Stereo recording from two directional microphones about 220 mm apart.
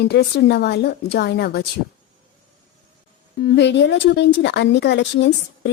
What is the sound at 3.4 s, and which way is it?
Speech, 50° left (ahead or behind).